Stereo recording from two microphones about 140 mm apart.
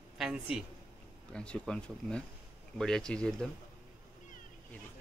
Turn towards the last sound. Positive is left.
turn(degrees=5)  # may be behind; listen again after turning